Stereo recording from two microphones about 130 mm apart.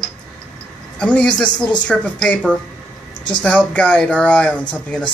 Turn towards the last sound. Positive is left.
turn(degrees=10)  # may be behind; listen again after turning